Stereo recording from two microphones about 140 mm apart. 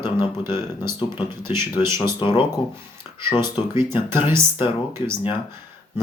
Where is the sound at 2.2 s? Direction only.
35° left (ahead or behind).